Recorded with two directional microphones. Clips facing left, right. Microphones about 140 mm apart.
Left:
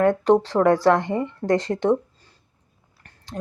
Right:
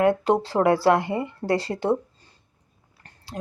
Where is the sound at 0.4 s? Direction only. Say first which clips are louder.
Left 2 dB; 10° right (ahead or behind).